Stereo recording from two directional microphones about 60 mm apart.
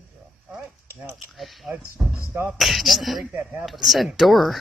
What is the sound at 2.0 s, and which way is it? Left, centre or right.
Speech, centre.